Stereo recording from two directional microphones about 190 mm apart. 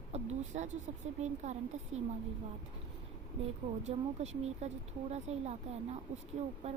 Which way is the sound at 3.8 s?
35° right (ahead or behind).